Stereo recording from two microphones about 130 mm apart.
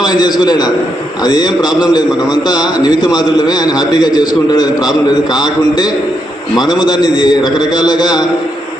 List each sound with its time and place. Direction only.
0.0 s a man's voice: 30° left (ahead or behind)